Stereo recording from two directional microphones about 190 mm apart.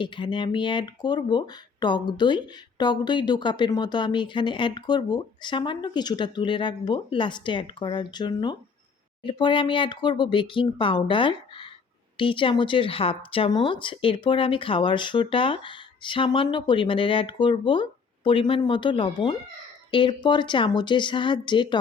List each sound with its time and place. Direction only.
0.0 s speech: 25° left (ahead or behind)